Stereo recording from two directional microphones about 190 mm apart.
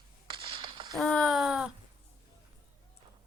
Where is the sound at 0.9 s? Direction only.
5° left (ahead or behind).